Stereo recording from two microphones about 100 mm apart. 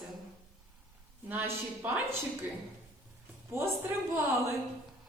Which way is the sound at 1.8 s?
20° right (ahead or behind).